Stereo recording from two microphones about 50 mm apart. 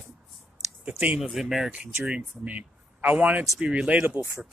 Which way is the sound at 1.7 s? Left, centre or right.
Centre.